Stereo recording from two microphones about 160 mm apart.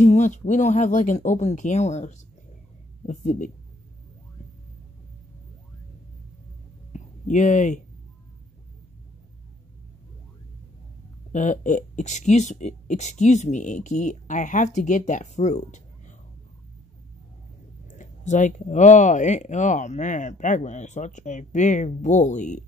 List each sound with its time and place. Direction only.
0.0 s speech: 50° left (ahead or behind)
6.9 s a sound: 50° left (ahead or behind)
11.3 s speech: 50° left (ahead or behind)
17.8 s speech: 50° left (ahead or behind)